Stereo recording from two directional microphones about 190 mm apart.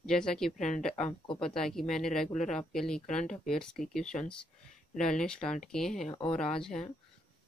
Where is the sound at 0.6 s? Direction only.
40° left (ahead or behind).